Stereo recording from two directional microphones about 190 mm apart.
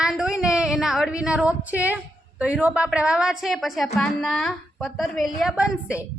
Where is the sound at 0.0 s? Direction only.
5° right (ahead or behind).